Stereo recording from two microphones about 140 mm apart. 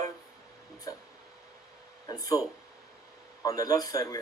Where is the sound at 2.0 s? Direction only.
25° left (ahead or behind).